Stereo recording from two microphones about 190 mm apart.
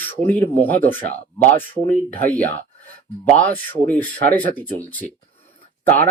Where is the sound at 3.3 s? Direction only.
10° left (ahead or behind).